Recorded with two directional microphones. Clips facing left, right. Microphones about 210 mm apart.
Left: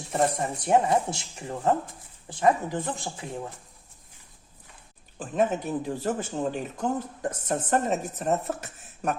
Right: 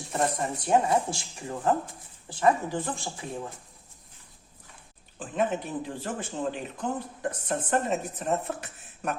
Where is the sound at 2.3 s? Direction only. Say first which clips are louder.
Left 1 dB; 20° left (ahead or behind).